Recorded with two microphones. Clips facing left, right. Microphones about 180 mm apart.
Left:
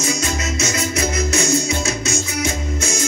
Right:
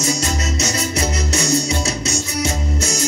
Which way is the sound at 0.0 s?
35° right (ahead or behind).